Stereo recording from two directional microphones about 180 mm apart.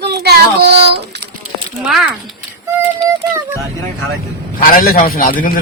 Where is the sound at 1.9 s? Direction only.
Centre (ahead or behind).